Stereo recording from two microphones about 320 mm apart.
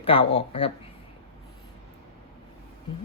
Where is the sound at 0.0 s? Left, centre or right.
Centre.